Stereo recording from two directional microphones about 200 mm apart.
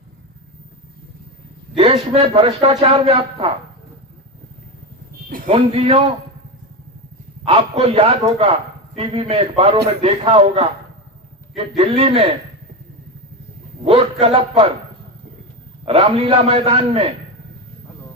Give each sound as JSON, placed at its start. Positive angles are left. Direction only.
{"t": 1.7, "sound": "a man's voice", "side_deg": -25}
{"t": 5.5, "sound": "a man's voice", "side_deg": -30}
{"t": 7.4, "sound": "a man's voice", "side_deg": -30}
{"t": 11.8, "sound": "a man's voice", "side_deg": -30}
{"t": 13.8, "sound": "a man's voice", "side_deg": -25}
{"t": 15.9, "sound": "a man's voice", "side_deg": -30}